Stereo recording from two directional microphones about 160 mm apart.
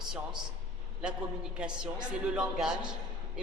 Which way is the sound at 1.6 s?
5° right (ahead or behind).